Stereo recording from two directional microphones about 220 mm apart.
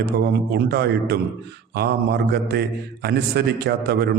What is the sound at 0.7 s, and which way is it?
A man's voice, 45° right (ahead or behind).